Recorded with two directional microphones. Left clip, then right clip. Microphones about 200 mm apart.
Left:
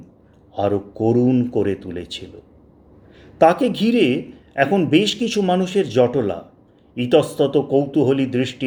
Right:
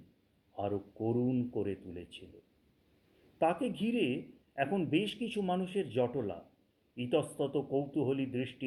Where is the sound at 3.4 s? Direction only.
5° left (ahead or behind).